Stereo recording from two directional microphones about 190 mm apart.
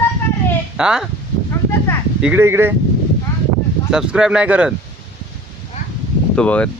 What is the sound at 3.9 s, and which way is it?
Speech, 5° right (ahead or behind).